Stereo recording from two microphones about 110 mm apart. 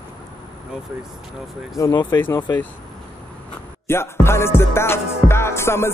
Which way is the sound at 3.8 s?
25° left (ahead or behind).